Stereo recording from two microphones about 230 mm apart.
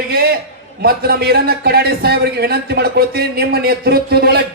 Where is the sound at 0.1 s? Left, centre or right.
Right.